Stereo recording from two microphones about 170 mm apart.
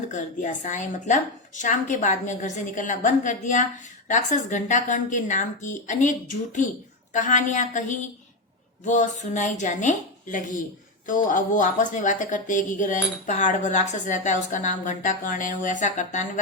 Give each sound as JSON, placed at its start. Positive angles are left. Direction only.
{"t": 0.1, "sound": "a woman's voice", "side_deg": 45}